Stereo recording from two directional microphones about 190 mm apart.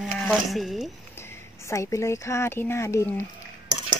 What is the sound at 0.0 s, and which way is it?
Speech, centre (ahead or behind).